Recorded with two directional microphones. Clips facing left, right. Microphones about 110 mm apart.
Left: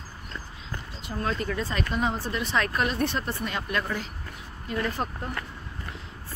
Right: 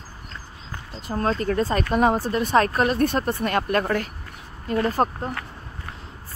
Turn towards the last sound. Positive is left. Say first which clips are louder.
# right 8 dB
turn(degrees=-40)  # may be behind; listen again after turning